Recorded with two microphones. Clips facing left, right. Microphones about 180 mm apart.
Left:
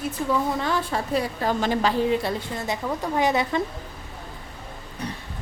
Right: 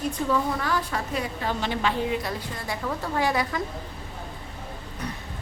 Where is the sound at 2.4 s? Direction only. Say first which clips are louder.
Left 4 dB; 25° left (ahead or behind).